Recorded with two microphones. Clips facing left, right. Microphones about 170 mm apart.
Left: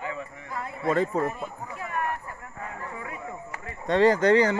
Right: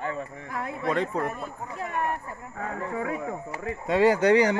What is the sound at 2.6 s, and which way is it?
Speech, 90° right.